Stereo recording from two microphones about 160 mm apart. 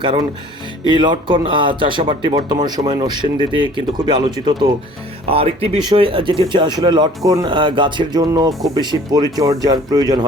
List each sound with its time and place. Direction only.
0.0 s speech: 30° right (ahead or behind)